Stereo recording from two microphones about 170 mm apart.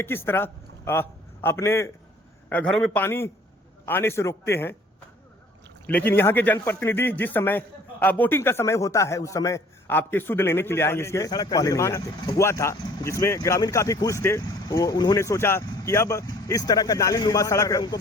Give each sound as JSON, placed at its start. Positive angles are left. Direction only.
{"t": 0.0, "sound": "a man's voice", "side_deg": 15}
{"t": 5.9, "sound": "a man's voice", "side_deg": 10}